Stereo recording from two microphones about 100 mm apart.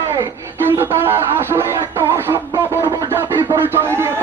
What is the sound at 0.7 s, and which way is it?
Music, 20° right (ahead or behind).